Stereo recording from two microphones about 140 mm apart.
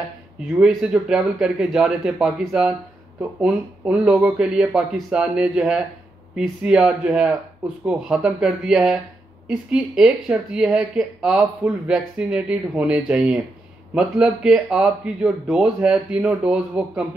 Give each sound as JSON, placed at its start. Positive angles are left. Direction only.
{"t": 0.4, "sound": "speech", "side_deg": -5}